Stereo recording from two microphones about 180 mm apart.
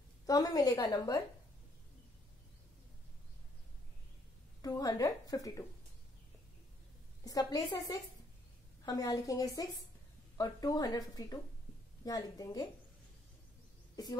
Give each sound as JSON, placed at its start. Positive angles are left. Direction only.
{"t": 0.3, "sound": "a woman's voice", "side_deg": 20}
{"t": 4.6, "sound": "a woman's voice", "side_deg": 20}
{"t": 7.2, "sound": "a woman's voice", "side_deg": 20}